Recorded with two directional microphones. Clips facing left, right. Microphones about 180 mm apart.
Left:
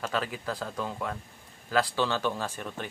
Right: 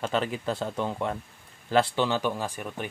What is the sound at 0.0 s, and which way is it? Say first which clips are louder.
Speech: right 4 dB; 25° right (ahead or behind).